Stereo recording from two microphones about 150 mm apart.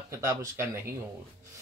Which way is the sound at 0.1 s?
20° right (ahead or behind).